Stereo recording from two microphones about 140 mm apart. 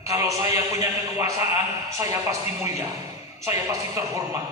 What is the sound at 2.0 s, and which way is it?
A man's voice, 20° right (ahead or behind).